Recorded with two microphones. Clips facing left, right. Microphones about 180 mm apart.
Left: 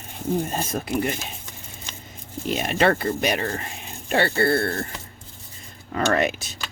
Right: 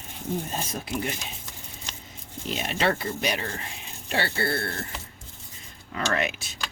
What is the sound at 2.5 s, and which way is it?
Speech, 55° left (ahead or behind).